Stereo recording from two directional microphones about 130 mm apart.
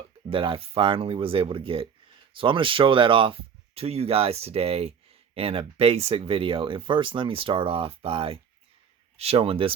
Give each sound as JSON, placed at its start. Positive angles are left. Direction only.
{"t": 0.3, "sound": "speech", "side_deg": -40}